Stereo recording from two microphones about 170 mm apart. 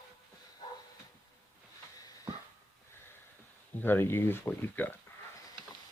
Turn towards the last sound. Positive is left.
turn(degrees=15)  # may be behind; listen again after turning